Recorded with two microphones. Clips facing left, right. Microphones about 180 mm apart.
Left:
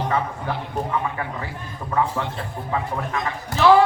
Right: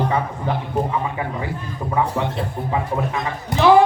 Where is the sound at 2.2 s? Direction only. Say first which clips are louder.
Right 5 dB; 20° right (ahead or behind).